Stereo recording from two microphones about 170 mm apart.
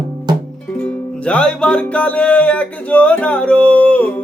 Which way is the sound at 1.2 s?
5° left (ahead or behind).